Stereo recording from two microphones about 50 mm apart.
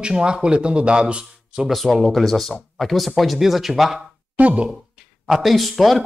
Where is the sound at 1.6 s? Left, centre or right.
Centre.